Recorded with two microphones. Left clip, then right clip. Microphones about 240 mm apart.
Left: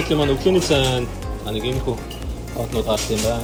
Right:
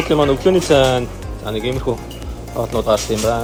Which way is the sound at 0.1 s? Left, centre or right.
Right.